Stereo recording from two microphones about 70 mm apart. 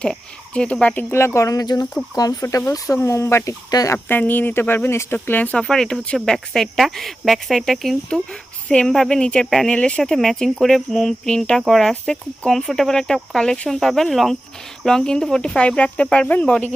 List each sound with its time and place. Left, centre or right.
0.0 s speech: centre
1.1 s speech: left
1.5 s speech: left
2.4 s speech: left
3.9 s speech: left
5.5 s speech: centre